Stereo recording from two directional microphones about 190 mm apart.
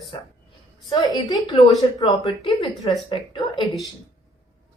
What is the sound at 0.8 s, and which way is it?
Speech, 20° left (ahead or behind).